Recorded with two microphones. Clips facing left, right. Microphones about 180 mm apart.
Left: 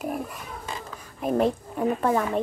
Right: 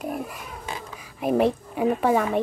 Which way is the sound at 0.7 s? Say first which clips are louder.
Right 1 dB; 10° right (ahead or behind).